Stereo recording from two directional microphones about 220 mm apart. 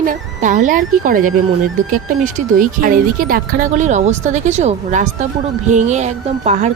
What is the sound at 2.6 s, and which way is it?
Speech, 40° right (ahead or behind).